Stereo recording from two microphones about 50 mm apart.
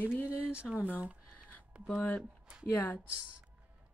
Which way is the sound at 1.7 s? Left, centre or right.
Right.